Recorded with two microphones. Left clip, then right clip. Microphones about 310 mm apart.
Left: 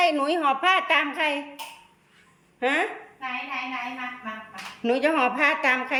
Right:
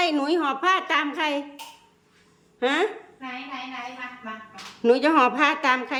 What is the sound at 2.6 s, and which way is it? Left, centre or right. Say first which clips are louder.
Speech: right 1 dB; centre.